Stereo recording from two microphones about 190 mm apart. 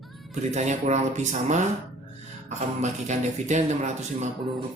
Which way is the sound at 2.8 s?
40° right (ahead or behind).